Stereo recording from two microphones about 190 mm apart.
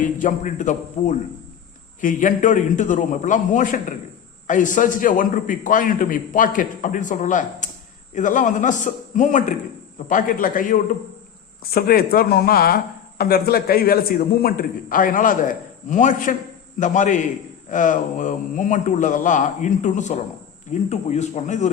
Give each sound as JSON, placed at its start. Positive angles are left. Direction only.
{"t": 0.0, "sound": "a man's voice", "side_deg": 45}